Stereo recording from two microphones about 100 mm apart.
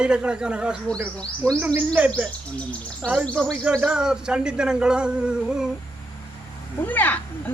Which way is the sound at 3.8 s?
10° right (ahead or behind).